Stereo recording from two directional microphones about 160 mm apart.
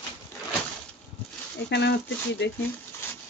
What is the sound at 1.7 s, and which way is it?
Speech, 90° left.